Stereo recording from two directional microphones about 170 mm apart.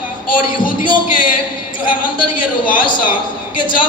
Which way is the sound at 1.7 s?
50° left (ahead or behind).